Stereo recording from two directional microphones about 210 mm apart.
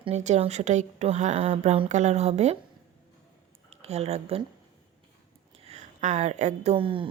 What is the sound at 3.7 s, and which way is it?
Speech, 30° right (ahead or behind).